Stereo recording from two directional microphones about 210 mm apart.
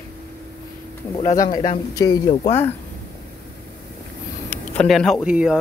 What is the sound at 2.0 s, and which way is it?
Speech, 15° left (ahead or behind).